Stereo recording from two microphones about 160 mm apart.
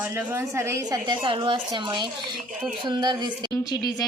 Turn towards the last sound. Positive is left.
turn(degrees=25)  # may be behind; listen again after turning